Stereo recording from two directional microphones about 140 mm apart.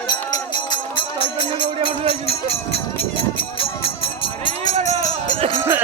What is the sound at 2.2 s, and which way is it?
Run, 45° left (ahead or behind).